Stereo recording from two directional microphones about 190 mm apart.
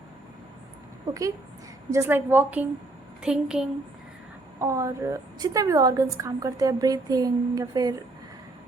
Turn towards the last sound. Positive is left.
turn(degrees=-20)  # may be behind; listen again after turning